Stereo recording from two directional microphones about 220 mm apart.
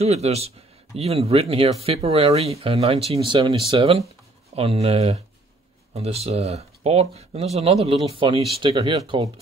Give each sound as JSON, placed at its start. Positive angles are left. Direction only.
{"t": 0.0, "sound": "speech", "side_deg": -30}